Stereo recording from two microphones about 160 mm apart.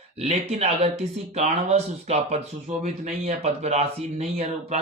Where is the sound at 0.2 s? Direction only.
40° right (ahead or behind).